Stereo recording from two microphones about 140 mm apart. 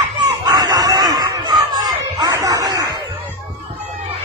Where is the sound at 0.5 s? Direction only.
25° right (ahead or behind).